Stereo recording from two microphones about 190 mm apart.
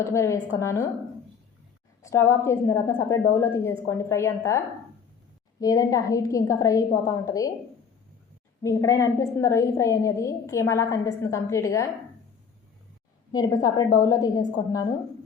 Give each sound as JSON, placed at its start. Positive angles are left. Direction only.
{"t": 0.0, "sound": "a woman's voice", "side_deg": 15}
{"t": 2.0, "sound": "a woman's voice", "side_deg": 15}
{"t": 8.6, "sound": "a woman's voice", "side_deg": 15}
{"t": 13.3, "sound": "a woman's voice", "side_deg": 20}